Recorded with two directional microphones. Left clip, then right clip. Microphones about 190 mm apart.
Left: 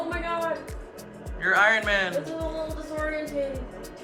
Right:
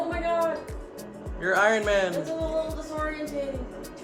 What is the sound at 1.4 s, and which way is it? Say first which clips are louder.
Speech: left 2 dB; 25° right (ahead or behind).